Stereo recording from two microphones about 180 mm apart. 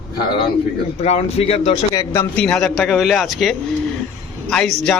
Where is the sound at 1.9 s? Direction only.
20° left (ahead or behind).